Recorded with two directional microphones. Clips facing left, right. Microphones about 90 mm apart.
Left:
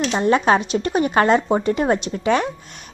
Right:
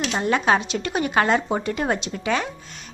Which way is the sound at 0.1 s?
25° left (ahead or behind).